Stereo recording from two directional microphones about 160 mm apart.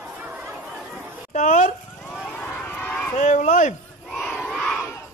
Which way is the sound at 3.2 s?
50° left (ahead or behind).